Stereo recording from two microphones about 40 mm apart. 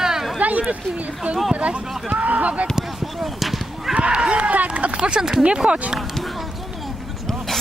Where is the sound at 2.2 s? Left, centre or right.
Right.